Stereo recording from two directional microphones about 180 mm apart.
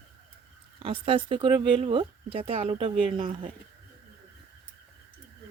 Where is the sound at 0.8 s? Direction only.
30° right (ahead or behind).